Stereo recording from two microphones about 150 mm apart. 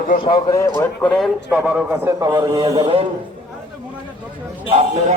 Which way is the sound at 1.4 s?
10° right (ahead or behind).